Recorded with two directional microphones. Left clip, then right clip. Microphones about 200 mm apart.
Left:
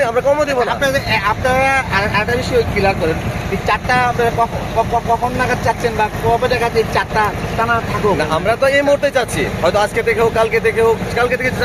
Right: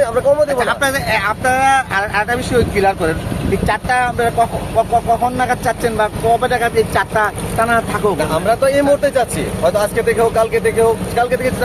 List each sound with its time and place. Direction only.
0.0 s speech: 25° left (ahead or behind)
0.6 s speech: 55° right (ahead or behind)
5.4 s speech: 55° right (ahead or behind)
8.2 s speech: 15° left (ahead or behind)